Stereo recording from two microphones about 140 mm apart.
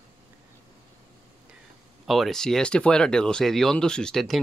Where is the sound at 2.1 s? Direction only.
Centre (ahead or behind).